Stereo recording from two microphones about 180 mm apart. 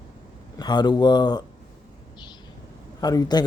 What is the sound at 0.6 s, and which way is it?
Speech, 25° left (ahead or behind).